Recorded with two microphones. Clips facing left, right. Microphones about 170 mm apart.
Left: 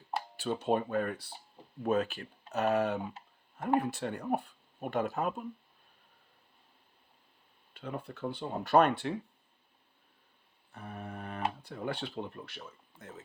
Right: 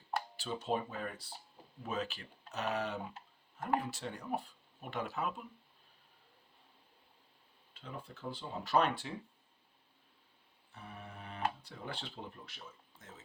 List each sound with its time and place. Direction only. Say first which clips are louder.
0.3 s speech: left 8 dB; 55° left (ahead or behind)
7.7 s speech: left 8 dB; 65° left (ahead or behind)
10.7 s speech: left 7 dB; 55° left (ahead or behind)